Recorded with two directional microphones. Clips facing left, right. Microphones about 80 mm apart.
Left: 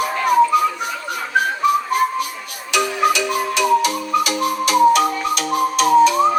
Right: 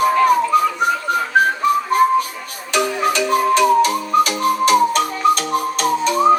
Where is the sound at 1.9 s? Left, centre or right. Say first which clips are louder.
Right 4 dB; right.